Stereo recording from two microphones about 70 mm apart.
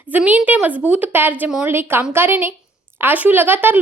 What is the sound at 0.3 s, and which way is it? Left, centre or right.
A woman's voice, right.